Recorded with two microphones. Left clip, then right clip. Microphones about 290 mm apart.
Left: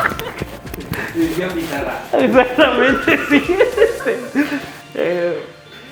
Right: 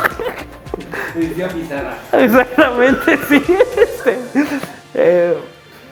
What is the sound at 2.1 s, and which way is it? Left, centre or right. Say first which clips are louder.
A man's voice: right 2 dB; right.